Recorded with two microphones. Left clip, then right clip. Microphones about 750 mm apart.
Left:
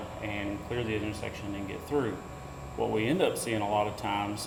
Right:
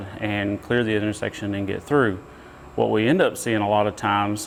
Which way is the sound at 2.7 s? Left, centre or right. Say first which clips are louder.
Right 9 dB; right.